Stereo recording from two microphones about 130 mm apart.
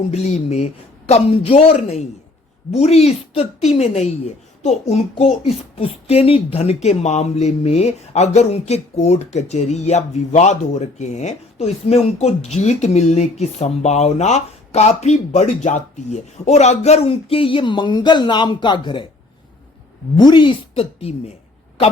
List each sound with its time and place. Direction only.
0.1 s speech: 60° left (ahead or behind); by 19.0 s 40° left (ahead or behind)
20.1 s a woman's voice: 35° left (ahead or behind); by 21.3 s 55° left (ahead or behind)